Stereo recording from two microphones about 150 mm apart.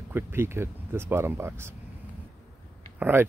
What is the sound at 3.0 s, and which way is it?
Speech, 15° right (ahead or behind).